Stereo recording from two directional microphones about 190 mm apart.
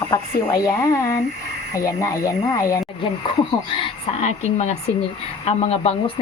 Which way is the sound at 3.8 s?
35° left (ahead or behind).